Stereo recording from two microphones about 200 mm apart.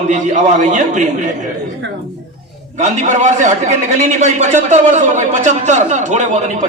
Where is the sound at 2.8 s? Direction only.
35° right (ahead or behind).